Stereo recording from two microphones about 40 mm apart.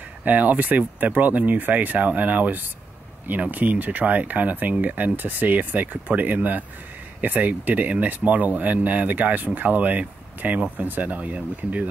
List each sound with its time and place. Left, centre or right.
0.2 s speech: right